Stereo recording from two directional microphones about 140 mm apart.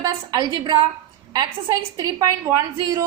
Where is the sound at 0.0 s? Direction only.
25° right (ahead or behind).